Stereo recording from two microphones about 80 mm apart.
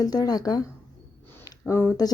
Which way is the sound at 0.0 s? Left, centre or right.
Left.